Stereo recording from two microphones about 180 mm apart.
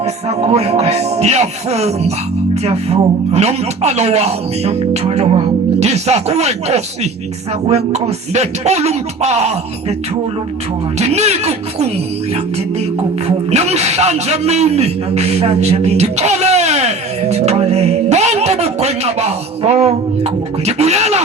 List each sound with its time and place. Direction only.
0.0 s speech: 35° right (ahead or behind)
10.9 s speech: 35° right (ahead or behind)
13.2 s a man's voice: 35° right (ahead or behind)